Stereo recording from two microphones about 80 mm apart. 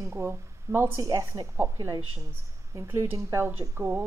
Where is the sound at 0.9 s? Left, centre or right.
Right.